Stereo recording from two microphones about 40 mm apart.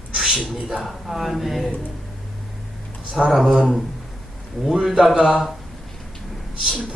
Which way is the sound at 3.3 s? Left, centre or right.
Centre.